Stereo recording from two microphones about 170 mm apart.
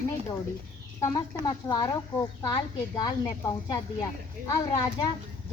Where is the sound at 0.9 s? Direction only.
25° left (ahead or behind).